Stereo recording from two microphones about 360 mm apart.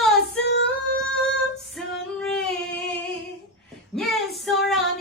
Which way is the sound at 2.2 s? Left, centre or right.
Centre.